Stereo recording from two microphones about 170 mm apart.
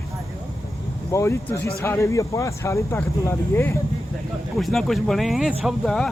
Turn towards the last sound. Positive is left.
turn(degrees=0)  # may be behind; listen again after turning